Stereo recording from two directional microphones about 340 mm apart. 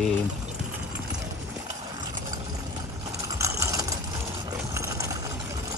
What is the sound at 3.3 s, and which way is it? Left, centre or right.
Ratchet, centre.